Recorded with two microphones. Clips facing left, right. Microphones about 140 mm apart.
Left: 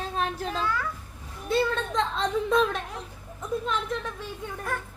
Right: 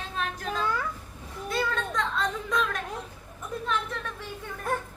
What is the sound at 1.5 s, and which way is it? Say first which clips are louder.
A child's voice: left 4 dB; 25° left (ahead or behind).